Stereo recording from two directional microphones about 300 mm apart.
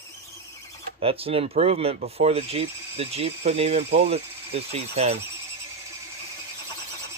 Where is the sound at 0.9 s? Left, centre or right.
Centre.